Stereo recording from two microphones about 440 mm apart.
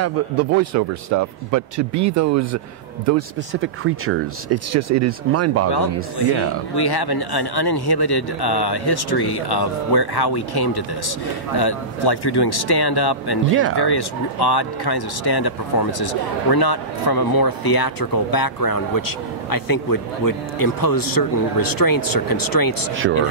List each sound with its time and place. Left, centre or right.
0.0 s speech: right
6.7 s a man's voice: left
13.5 s speech: right
13.7 s speech: left